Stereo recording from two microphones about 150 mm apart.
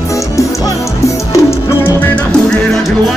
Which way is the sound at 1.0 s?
15° left (ahead or behind).